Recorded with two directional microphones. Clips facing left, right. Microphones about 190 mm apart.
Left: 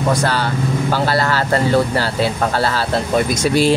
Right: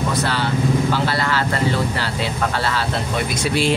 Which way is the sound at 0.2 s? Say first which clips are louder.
Left 2 dB; 45° left (ahead or behind).